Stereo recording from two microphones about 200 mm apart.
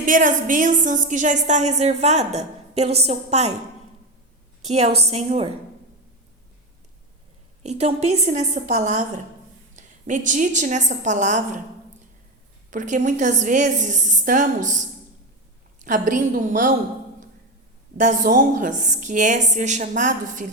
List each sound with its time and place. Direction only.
0.0 s a woman's voice: 40° right (ahead or behind)
4.6 s a woman's voice: 35° right (ahead or behind)
7.6 s a woman's voice: 35° right (ahead or behind)
12.7 s a woman's voice: 40° right (ahead or behind)
15.8 s a woman's voice: 40° right (ahead or behind)
17.9 s a woman's voice: 40° right (ahead or behind)